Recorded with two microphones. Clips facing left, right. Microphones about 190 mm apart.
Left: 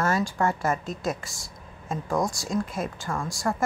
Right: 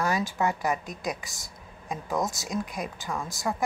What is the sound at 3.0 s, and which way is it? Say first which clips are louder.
Speech: left 2 dB; centre (ahead or behind).